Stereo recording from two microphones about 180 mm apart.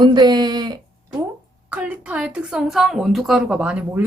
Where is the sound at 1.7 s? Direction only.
10° right (ahead or behind).